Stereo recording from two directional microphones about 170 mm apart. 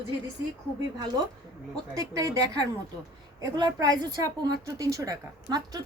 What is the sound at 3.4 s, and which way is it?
A woman's voice, 20° right (ahead or behind).